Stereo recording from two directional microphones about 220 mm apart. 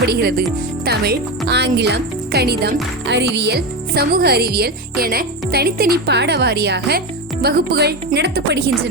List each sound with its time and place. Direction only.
0.0 s speech: 45° right (ahead or behind)